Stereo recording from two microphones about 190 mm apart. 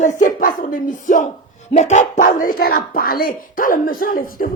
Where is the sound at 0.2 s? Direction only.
45° left (ahead or behind).